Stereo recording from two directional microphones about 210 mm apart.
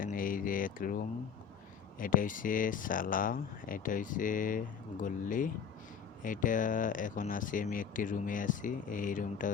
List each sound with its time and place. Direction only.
0.0 s speech: 40° left (ahead or behind)
2.0 s speech: 40° left (ahead or behind)